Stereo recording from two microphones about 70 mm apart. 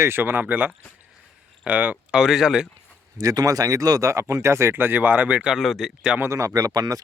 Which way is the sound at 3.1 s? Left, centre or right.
Right.